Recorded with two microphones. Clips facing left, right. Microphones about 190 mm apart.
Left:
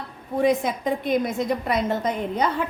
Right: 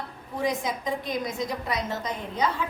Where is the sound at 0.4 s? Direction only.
60° left (ahead or behind).